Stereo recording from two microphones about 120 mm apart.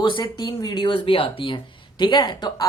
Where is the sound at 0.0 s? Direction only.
40° left (ahead or behind).